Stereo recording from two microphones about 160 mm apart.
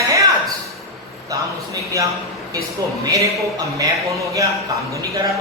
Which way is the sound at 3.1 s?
20° right (ahead or behind).